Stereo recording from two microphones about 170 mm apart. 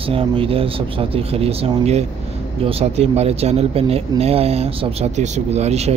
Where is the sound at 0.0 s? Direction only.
30° right (ahead or behind).